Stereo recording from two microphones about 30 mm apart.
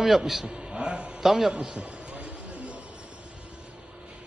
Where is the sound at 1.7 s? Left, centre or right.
Right.